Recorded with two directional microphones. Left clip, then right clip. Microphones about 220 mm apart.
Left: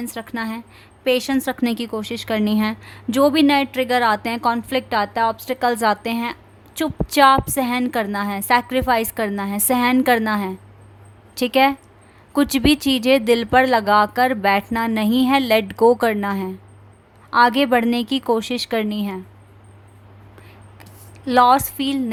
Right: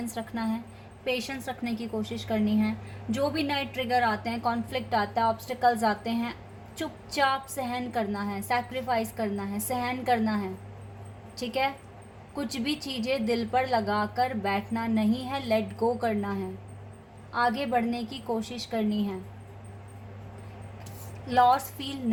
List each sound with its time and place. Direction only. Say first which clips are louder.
0.1 s a woman's voice: left 6 dB; 40° left (ahead or behind)
12.3 s a woman's voice: left 15 dB; 45° left (ahead or behind)
17.5 s a woman's voice: left 11 dB; 45° left (ahead or behind)
21.5 s a woman's voice: left 10 dB; 40° left (ahead or behind)